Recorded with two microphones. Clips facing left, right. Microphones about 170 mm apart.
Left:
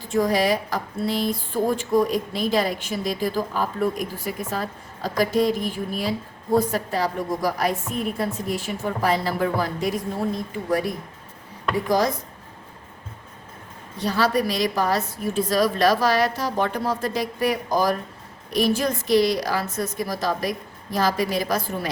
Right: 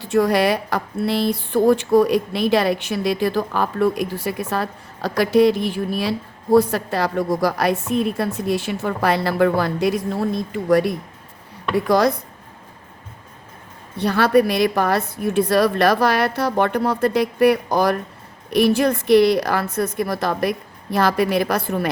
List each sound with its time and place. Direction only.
0.0 s speech: 70° right (ahead or behind)
14.0 s a woman's voice: 60° right (ahead or behind)